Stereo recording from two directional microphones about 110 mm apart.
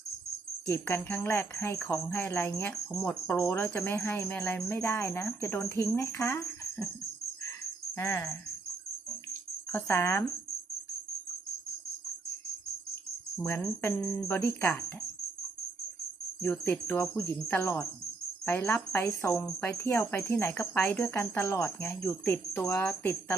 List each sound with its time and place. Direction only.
0.7 s speech: 20° left (ahead or behind)
7.9 s speech: 25° left (ahead or behind)
9.7 s speech: 20° left (ahead or behind)
12.9 s speech: 20° left (ahead or behind)
16.4 s speech: 20° left (ahead or behind)